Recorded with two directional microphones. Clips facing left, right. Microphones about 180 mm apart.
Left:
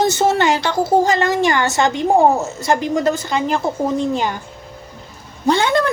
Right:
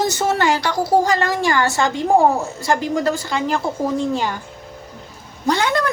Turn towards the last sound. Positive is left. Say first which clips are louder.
# left 3 dB
turn(degrees=25)  # may be behind; listen again after turning